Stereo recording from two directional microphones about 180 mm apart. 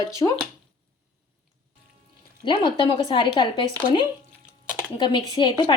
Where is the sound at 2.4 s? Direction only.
25° left (ahead or behind).